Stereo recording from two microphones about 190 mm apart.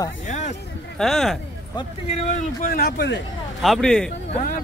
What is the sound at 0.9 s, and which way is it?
Speech, centre (ahead or behind).